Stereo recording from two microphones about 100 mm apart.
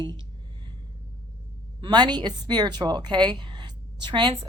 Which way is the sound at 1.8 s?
45° right (ahead or behind).